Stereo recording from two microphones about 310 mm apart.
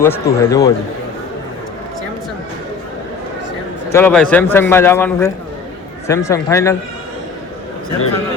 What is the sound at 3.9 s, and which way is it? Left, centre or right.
A man's voice, centre.